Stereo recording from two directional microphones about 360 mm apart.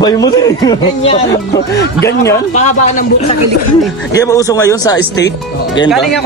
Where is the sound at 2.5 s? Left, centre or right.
Centre.